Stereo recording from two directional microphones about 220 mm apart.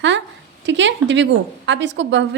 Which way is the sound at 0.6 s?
55° right (ahead or behind).